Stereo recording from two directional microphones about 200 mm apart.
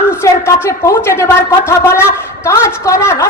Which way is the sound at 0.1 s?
15° left (ahead or behind).